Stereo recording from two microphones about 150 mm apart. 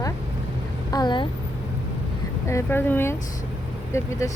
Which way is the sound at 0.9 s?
30° left (ahead or behind).